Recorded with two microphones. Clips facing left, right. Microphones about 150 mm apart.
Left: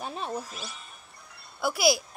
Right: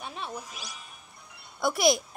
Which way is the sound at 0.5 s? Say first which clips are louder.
Left 3 dB; 15° right (ahead or behind).